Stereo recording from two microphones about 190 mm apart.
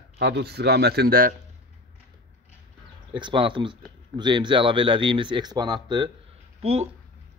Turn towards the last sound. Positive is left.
turn(degrees=-35)  # may be behind; listen again after turning